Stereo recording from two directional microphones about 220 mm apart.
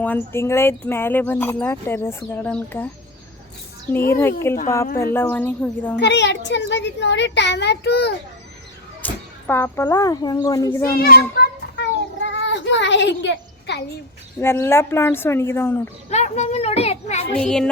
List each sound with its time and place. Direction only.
0.0 s speech: 10° left (ahead or behind)
4.1 s speech: 10° left (ahead or behind)
6.0 s a child's voice: 50° left (ahead or behind)
9.0 s speech: 10° left (ahead or behind)
11.0 s child singing: 45° left (ahead or behind)
14.4 s speech: 10° left (ahead or behind)
16.0 s a child's voice: 30° left (ahead or behind)
17.4 s music: 5° left (ahead or behind)